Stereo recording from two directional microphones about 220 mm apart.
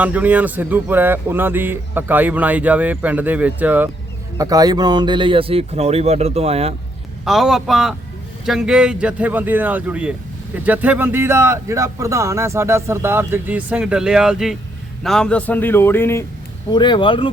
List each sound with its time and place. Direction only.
0.0 s speech: 5° right (ahead or behind); by 6.7 s 30° right (ahead or behind)
7.3 s a man's voice: centre (ahead or behind)
16.7 s speech: 20° left (ahead or behind)